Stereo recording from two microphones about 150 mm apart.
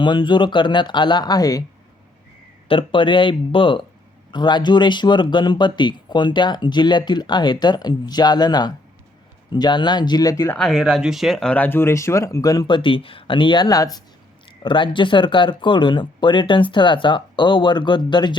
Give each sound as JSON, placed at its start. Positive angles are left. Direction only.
{"t": 0.0, "sound": "speech", "side_deg": 35}
{"t": 2.6, "sound": "speech", "side_deg": 35}
{"t": 10.5, "sound": "speech", "side_deg": 0}